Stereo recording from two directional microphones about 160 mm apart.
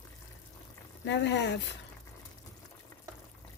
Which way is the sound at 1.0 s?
90° left.